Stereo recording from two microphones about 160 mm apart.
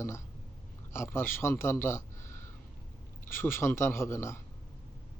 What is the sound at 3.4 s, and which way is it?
A man's voice, 15° left (ahead or behind).